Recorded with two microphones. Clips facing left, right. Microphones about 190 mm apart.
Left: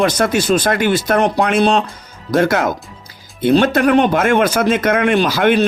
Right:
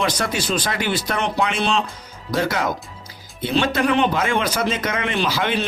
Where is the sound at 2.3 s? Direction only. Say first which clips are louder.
Left 7 dB; 55° left (ahead or behind).